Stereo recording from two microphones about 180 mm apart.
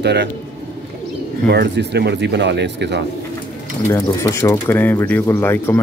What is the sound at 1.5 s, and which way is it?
Speech, 65° right (ahead or behind).